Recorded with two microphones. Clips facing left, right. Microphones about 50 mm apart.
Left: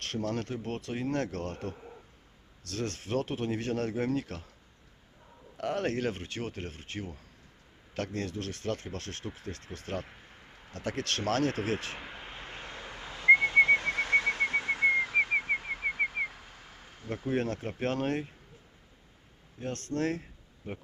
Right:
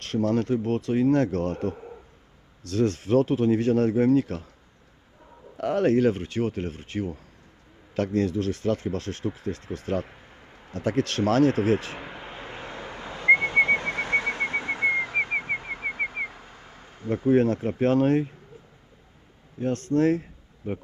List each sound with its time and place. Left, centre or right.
0.2 s speech: right
0.5 s speech: centre
1.1 s speech: right
5.6 s speech: right
11.9 s whistling: centre
17.1 s speech: centre
19.5 s speech: centre